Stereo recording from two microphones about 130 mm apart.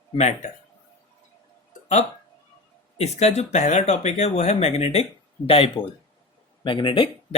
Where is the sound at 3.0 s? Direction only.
55° left (ahead or behind).